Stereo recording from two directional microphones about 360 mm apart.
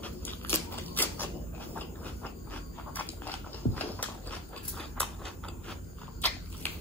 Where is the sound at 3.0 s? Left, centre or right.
Centre.